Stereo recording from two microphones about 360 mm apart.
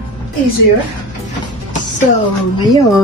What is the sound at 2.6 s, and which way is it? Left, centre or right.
Speech, centre.